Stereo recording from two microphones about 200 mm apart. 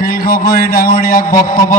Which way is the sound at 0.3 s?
45° left (ahead or behind).